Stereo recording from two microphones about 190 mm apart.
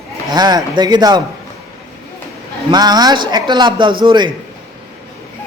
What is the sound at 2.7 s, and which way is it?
Speech, 20° right (ahead or behind).